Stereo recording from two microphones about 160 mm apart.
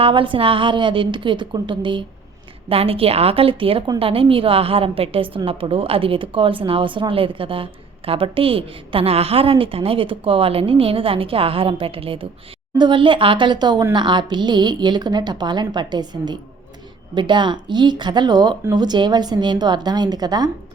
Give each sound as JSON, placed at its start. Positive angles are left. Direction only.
{"t": 0.0, "sound": "a woman's voice", "side_deg": -30}